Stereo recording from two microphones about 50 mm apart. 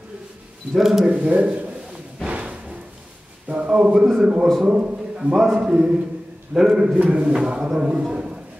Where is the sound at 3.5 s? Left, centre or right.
Right.